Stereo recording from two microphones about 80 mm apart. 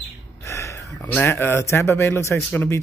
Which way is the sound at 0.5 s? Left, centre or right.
Left.